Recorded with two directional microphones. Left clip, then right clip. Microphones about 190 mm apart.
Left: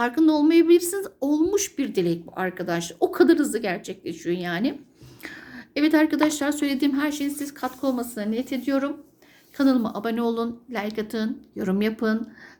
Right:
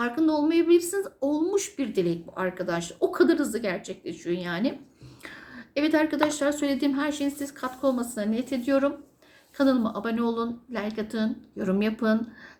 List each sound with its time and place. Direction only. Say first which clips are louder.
0.0 s a woman's voice: left 4 dB; 45° left (ahead or behind)